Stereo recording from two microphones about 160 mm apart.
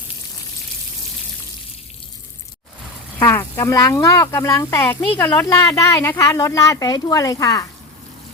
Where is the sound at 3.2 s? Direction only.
15° left (ahead or behind).